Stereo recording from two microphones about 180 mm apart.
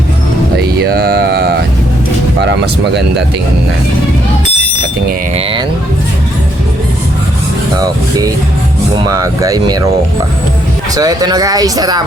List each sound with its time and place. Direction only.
0.5 s a sound: 65° right (ahead or behind)
2.4 s speech: 75° right (ahead or behind)
7.8 s speech: 20° right (ahead or behind)
10.9 s speech: 20° right (ahead or behind)